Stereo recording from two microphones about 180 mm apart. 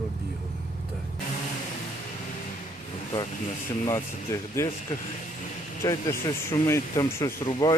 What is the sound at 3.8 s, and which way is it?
Speech, 15° left (ahead or behind).